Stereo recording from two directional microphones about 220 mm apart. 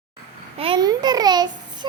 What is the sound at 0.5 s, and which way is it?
A child's voice, 25° right (ahead or behind).